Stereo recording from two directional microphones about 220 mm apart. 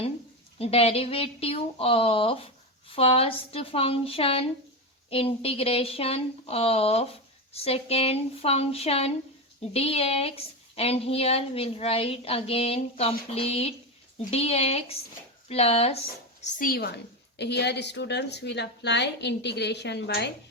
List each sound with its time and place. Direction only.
0.6 s speech: 25° left (ahead or behind)
16.4 s a woman's voice: 40° left (ahead or behind)